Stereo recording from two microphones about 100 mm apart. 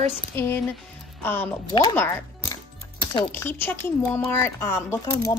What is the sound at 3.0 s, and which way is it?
Music, 55° left (ahead or behind).